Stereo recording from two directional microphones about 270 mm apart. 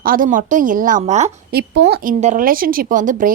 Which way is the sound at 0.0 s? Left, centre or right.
Right.